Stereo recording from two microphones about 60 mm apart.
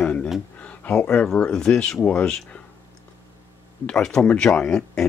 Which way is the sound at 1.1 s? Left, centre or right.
Centre.